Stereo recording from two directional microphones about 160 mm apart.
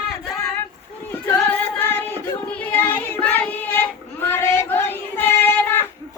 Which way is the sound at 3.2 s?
10° left (ahead or behind).